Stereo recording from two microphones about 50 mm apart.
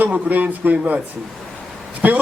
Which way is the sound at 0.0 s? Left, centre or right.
Right.